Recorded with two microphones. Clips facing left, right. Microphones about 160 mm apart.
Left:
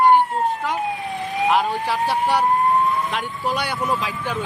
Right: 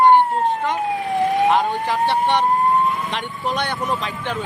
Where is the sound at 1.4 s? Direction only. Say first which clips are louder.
Right 2 dB; 5° left (ahead or behind).